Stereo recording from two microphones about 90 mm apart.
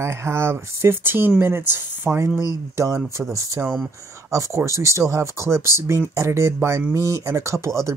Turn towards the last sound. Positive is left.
turn(degrees=-35)  # may be behind; listen again after turning